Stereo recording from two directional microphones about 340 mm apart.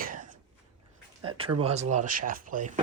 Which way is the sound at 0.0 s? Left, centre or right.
Right.